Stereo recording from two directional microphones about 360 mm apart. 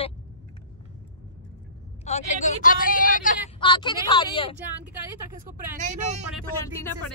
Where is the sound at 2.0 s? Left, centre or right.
Centre.